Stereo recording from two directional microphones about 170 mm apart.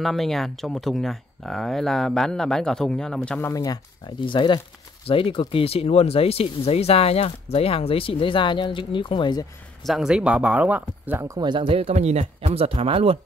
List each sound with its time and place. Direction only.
0.0 s speech: centre (ahead or behind); by 9.5 s 25° left (ahead or behind)
9.8 s speech: 5° right (ahead or behind)
11.3 s speech: 25° right (ahead or behind)